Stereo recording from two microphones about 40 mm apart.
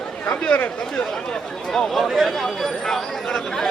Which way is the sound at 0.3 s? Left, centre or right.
Left.